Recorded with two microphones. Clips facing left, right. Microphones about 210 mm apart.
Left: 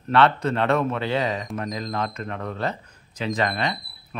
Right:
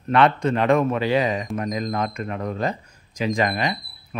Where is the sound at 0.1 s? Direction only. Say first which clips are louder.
Right 1 dB; 15° right (ahead or behind).